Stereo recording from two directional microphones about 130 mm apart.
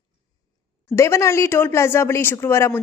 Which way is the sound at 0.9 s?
20° left (ahead or behind).